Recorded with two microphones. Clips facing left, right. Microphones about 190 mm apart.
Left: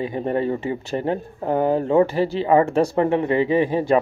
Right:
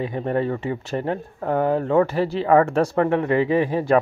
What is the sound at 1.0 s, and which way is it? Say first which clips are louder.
Speech: left 2 dB; 30° left (ahead or behind).